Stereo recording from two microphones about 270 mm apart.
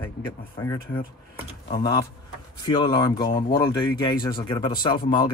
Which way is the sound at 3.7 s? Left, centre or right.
Centre.